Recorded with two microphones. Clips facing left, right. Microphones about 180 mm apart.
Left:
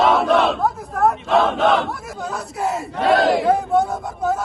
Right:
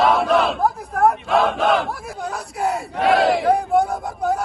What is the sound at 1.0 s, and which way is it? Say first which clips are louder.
Speech: even; centre (ahead or behind).